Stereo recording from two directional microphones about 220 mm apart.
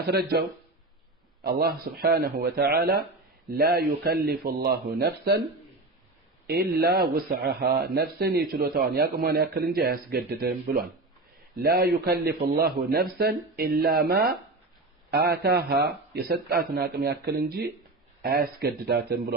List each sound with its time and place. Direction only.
0.0 s a man's voice: 45° right (ahead or behind)
1.5 s a man's voice: 45° right (ahead or behind)
6.5 s a man's voice: 45° right (ahead or behind)